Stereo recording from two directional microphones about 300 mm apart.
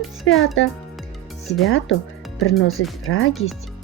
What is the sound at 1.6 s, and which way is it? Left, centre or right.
Speech, left.